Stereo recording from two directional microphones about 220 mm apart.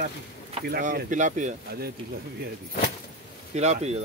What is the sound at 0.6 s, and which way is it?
Speech, 45° right (ahead or behind).